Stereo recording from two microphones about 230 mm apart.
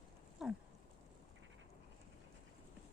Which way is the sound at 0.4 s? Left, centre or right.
Centre.